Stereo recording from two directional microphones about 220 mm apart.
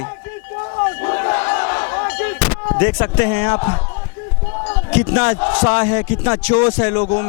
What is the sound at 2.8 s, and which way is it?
Speech, 10° left (ahead or behind).